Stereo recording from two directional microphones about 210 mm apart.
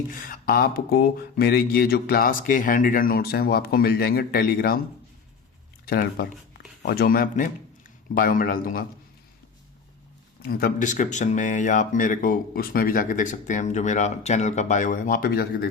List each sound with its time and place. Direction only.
0.1 s speech: 40° left (ahead or behind)
5.8 s speech: 45° left (ahead or behind)
10.4 s speech: 45° left (ahead or behind)